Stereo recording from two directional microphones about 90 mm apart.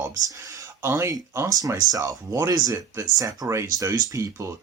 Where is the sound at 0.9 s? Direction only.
35° right (ahead or behind).